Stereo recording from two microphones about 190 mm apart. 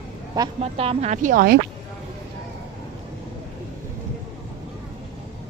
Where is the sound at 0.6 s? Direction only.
35° right (ahead or behind).